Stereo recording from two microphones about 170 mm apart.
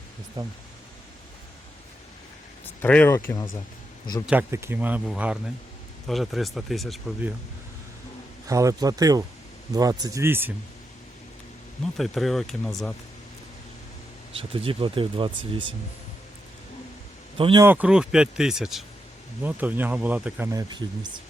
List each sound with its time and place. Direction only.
2.8 s speech: 10° left (ahead or behind)
4.3 s speech: 15° right (ahead or behind)
8.4 s speech: 20° right (ahead or behind)
11.9 s speech: centre (ahead or behind)
14.3 s speech: 35° right (ahead or behind)
17.3 s speech: 30° right (ahead or behind)
17.6 s speech: 10° right (ahead or behind)
20.5 s speech: 25° right (ahead or behind)